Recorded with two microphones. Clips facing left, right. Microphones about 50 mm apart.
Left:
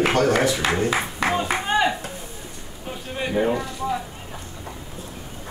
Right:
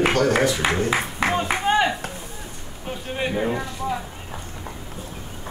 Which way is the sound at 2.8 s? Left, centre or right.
Centre.